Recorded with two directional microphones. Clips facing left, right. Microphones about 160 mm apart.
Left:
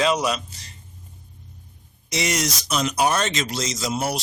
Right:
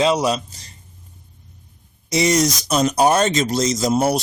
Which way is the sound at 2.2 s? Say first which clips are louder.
Right 8 dB; 35° right (ahead or behind).